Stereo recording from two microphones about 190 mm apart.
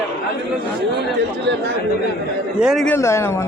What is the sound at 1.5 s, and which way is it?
Speech, 70° right (ahead or behind).